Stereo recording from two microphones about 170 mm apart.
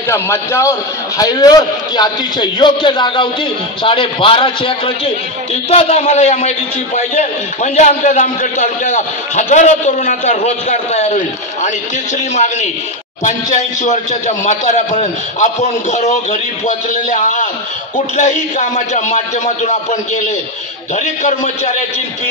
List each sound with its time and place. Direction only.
0.1 s a man's voice: 15° left (ahead or behind); by 11.7 s 45° left (ahead or behind)
13.2 s a man's voice: 45° left (ahead or behind)